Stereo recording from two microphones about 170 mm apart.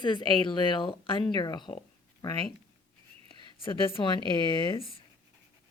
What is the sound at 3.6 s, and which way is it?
A woman's voice, 30° left (ahead or behind).